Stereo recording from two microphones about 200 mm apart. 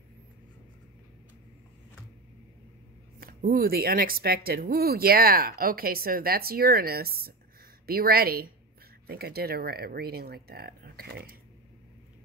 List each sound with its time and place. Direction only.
3.2 s speech: 45° right (ahead or behind)